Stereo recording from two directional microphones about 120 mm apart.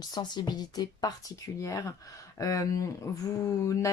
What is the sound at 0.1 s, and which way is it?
A woman's voice, 35° left (ahead or behind).